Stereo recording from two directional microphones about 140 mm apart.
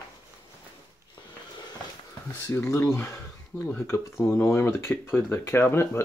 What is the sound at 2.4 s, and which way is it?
Speech, 20° left (ahead or behind).